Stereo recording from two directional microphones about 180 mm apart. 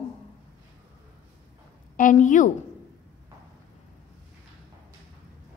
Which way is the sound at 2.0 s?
45° left (ahead or behind).